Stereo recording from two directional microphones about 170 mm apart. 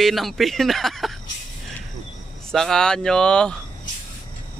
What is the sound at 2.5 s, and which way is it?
A man's voice, 5° left (ahead or behind).